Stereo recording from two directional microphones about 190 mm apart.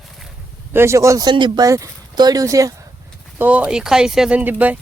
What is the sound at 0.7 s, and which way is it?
Speech, 15° right (ahead or behind).